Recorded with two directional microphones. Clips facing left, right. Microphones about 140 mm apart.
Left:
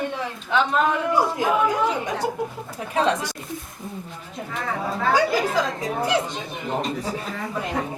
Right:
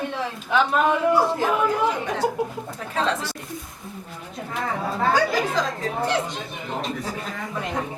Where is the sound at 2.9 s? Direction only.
15° left (ahead or behind).